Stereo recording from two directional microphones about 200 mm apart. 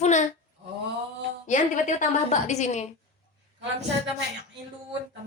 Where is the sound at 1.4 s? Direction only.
35° left (ahead or behind).